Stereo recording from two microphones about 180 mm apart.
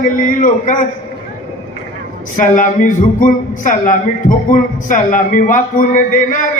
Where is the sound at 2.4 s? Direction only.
45° left (ahead or behind).